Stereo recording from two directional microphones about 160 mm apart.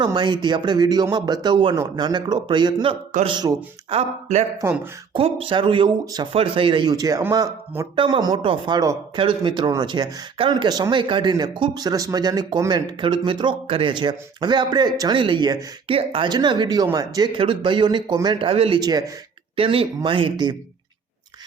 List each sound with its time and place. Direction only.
0.0 s speech: 25° right (ahead or behind)
7.9 s speech: 30° right (ahead or behind)
18.8 s speech: 25° right (ahead or behind)
19.5 s speech: 35° right (ahead or behind)